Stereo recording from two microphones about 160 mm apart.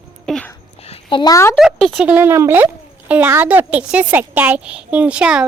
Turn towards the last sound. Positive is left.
turn(degrees=-5)  # may be behind; listen again after turning